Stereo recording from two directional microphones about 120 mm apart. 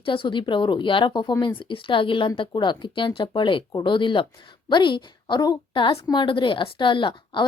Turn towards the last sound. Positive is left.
turn(degrees=40)  # may be behind; listen again after turning